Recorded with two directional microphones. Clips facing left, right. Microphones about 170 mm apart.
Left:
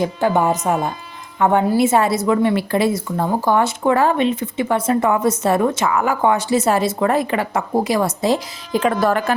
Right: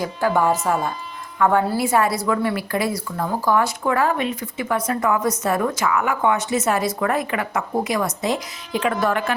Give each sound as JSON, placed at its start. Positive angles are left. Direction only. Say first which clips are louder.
{"t": 0.0, "sound": "a woman's voice", "louder": "left 3 dB", "side_deg": 25}